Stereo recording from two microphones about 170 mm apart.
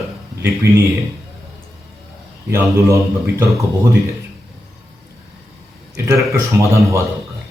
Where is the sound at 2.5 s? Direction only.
15° right (ahead or behind).